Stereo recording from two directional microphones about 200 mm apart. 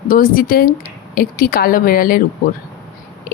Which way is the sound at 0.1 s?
45° left (ahead or behind).